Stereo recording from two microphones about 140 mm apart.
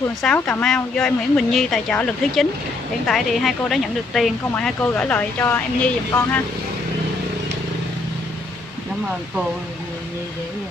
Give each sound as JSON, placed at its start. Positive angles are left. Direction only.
{"t": 0.2, "sound": "a woman's voice", "side_deg": 10}